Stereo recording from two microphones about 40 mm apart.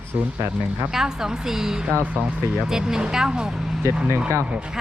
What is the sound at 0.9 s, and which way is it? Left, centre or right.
Speech, centre.